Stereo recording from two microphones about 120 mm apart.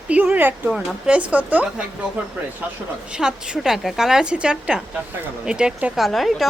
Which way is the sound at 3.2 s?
5° right (ahead or behind).